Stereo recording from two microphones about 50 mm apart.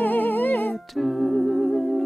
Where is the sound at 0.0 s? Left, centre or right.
Left.